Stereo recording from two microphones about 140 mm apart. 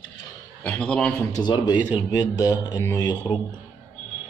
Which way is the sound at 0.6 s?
5° left (ahead or behind).